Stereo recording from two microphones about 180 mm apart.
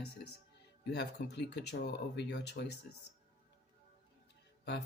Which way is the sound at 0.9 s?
70° left (ahead or behind).